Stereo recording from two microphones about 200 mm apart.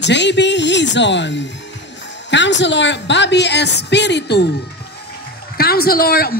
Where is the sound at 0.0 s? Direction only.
60° left (ahead or behind).